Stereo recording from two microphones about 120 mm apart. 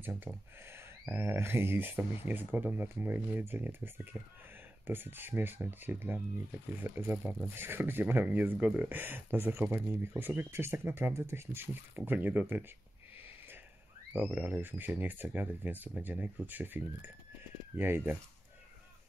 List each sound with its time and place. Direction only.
0.0 s speech: 20° right (ahead or behind)
14.1 s speech: 15° right (ahead or behind)